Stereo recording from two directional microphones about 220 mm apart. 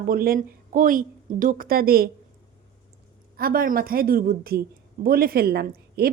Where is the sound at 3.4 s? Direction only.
40° right (ahead or behind).